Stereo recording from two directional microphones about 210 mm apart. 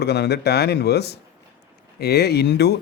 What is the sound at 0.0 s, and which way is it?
Speech, 50° left (ahead or behind).